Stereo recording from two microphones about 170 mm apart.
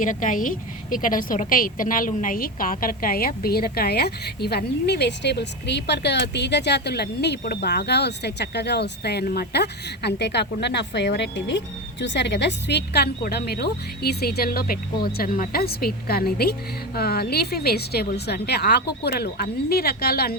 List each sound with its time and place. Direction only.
0.0 s a woman's voice: 50° left (ahead or behind)